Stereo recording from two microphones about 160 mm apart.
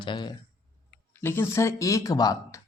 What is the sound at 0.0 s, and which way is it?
Speech, 30° left (ahead or behind).